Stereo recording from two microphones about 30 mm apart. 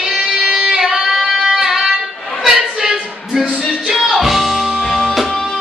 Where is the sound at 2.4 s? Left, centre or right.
Centre.